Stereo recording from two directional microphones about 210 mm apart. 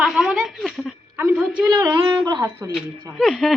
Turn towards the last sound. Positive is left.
turn(degrees=0)  # may be behind; listen again after turning